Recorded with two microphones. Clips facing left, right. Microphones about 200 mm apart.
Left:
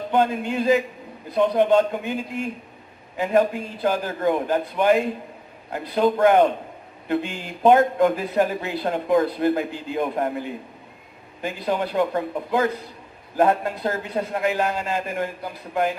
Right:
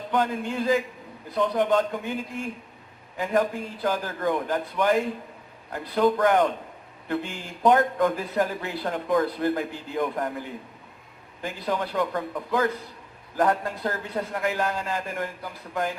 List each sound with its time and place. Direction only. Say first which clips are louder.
0.1 s speech: left 4 dB; 25° left (ahead or behind)